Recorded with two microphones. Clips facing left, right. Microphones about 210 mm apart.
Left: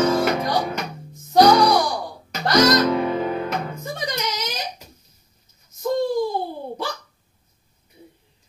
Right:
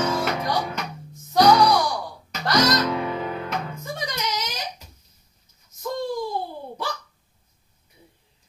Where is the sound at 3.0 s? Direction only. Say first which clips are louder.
Left 5 dB; 40° left (ahead or behind).